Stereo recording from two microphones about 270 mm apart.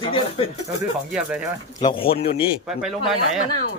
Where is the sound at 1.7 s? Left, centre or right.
Centre.